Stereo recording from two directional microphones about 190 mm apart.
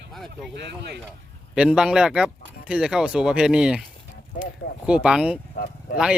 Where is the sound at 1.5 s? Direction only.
5° right (ahead or behind).